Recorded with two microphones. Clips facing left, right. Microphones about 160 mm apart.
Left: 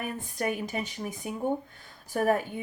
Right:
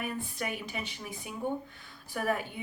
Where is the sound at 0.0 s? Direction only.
45° left (ahead or behind).